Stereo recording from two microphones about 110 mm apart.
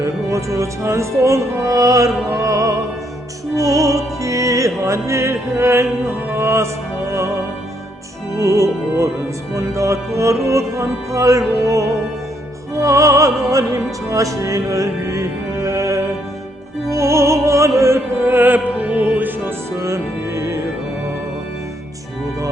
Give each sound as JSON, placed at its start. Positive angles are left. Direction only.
{"t": 0.0, "sound": "music", "side_deg": -25}
{"t": 8.4, "sound": "music", "side_deg": -30}
{"t": 16.9, "sound": "opera", "side_deg": -25}